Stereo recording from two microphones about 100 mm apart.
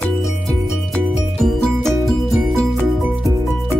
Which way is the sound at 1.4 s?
5° left (ahead or behind).